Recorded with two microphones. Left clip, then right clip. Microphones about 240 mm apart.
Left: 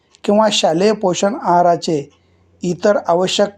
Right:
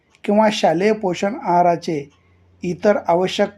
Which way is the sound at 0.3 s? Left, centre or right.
Left.